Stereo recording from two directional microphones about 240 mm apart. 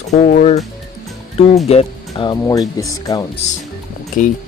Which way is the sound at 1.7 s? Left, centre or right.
Left.